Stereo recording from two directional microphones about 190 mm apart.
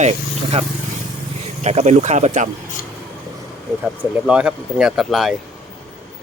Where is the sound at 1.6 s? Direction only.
35° right (ahead or behind).